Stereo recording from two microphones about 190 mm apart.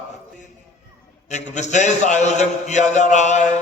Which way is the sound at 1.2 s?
40° left (ahead or behind).